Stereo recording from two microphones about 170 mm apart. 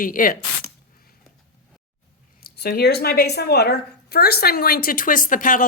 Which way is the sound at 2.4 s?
65° left (ahead or behind).